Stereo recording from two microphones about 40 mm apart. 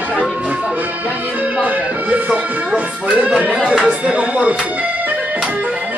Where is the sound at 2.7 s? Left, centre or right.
Right.